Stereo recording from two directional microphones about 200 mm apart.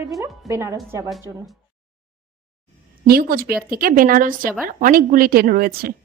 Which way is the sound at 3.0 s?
50° right (ahead or behind).